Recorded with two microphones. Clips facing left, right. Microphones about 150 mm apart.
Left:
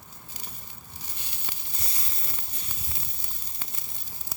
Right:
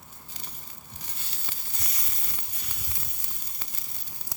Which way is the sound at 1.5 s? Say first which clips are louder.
Left 1 dB; 15° left (ahead or behind).